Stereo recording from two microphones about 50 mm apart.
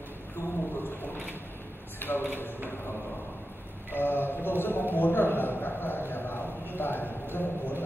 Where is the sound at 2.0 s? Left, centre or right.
Left.